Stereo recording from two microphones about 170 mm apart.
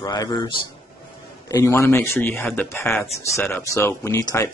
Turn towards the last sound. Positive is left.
turn(degrees=20)  # may be behind; listen again after turning